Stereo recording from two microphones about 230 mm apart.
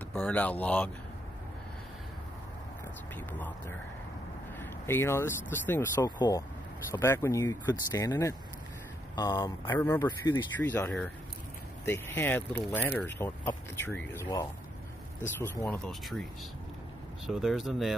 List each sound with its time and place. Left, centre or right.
0.1 s speech: centre
4.6 s speech: centre
17.3 s speech: centre